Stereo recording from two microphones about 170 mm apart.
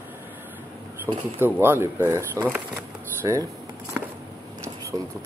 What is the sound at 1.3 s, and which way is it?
Speech, 10° right (ahead or behind).